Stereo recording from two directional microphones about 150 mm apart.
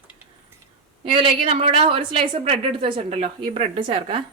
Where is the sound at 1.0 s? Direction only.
35° right (ahead or behind).